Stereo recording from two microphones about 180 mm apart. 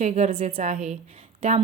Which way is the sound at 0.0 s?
40° right (ahead or behind).